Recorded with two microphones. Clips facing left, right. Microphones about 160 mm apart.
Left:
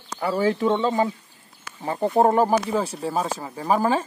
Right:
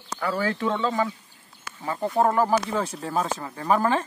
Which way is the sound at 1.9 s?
25° left (ahead or behind).